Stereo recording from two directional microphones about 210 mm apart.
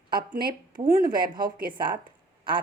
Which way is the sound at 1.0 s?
20° right (ahead or behind).